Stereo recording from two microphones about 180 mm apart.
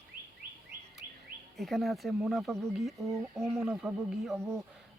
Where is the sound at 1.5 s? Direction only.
Centre (ahead or behind).